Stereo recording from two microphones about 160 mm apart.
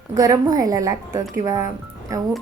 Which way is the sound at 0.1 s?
20° right (ahead or behind).